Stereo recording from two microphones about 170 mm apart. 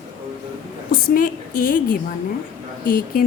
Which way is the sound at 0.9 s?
55° left (ahead or behind).